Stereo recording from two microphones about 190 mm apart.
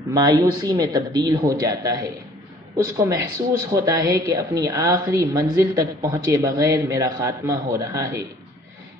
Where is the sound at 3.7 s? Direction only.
20° right (ahead or behind).